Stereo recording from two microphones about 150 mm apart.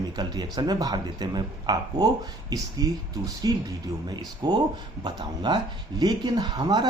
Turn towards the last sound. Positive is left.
turn(degrees=-30)  # may be behind; listen again after turning